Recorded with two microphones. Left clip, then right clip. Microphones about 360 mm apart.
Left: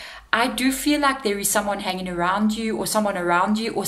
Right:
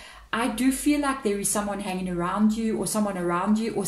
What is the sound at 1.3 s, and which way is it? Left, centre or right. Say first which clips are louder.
A woman's voice: left 5 dB; left.